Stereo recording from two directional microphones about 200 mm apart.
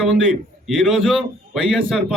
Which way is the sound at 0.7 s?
Centre (ahead or behind).